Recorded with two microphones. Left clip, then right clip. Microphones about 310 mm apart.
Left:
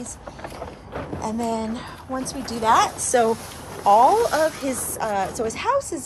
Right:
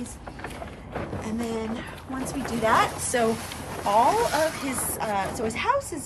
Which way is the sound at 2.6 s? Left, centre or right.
Centre.